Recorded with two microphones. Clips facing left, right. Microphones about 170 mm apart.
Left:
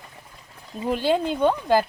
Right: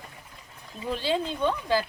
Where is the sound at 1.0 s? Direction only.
50° left (ahead or behind).